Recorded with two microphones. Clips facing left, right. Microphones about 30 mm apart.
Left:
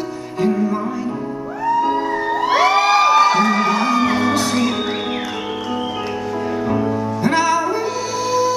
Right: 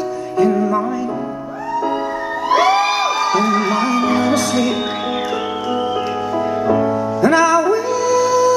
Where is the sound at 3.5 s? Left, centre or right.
Left.